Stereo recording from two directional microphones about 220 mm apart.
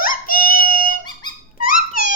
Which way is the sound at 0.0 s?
40° left (ahead or behind).